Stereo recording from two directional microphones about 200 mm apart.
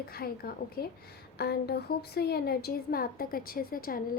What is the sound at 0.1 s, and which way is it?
A woman's voice, 50° left (ahead or behind).